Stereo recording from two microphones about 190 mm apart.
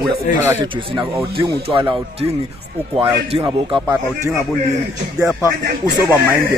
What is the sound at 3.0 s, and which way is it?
Speech, 25° right (ahead or behind).